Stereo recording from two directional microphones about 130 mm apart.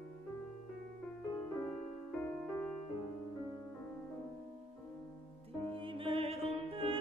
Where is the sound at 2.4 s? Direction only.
5° left (ahead or behind).